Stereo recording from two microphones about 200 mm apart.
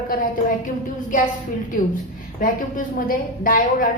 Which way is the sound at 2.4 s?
40° left (ahead or behind).